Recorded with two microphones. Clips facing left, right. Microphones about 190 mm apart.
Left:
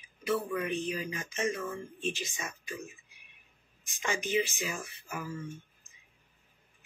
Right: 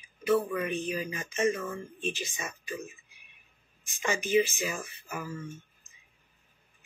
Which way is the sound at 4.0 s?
10° right (ahead or behind).